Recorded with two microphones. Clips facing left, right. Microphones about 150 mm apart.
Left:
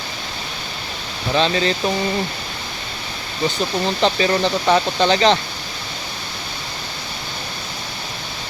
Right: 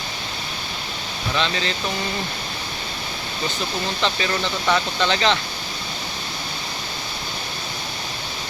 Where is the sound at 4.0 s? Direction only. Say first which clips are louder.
Left 7 dB; 35° left (ahead or behind).